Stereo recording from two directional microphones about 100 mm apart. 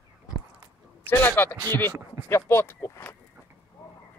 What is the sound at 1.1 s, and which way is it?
Speech, 20° left (ahead or behind).